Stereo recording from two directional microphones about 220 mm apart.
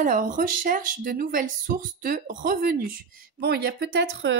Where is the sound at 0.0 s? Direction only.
40° right (ahead or behind).